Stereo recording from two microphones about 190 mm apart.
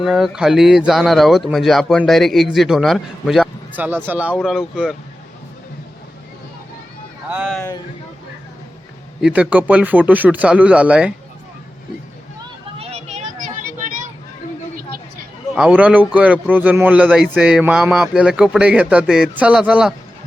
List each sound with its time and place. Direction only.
0.0 s speech: 5° right (ahead or behind)
7.3 s speech: 5° right (ahead or behind)
9.2 s speech: 10° right (ahead or behind)
12.8 s a sound: 35° right (ahead or behind)
15.5 s speech: 5° right (ahead or behind)